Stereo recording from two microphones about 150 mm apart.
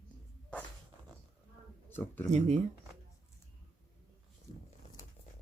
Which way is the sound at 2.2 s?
50° right (ahead or behind).